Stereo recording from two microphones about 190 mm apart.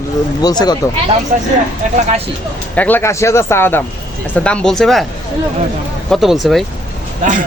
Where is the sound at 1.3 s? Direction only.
40° right (ahead or behind).